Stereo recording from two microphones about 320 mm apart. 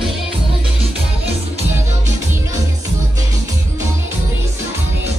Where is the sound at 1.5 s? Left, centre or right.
Right.